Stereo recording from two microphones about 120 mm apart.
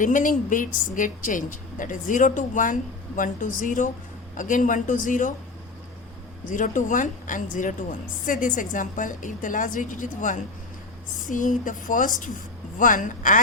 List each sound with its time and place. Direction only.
0.0 s a woman's voice: 90° left
6.5 s a woman's voice: 90° left